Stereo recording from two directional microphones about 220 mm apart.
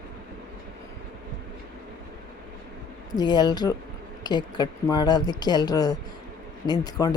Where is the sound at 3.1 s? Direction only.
20° left (ahead or behind).